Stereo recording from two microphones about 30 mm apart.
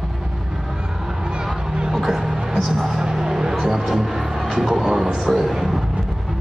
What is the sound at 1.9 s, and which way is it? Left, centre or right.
Music, centre.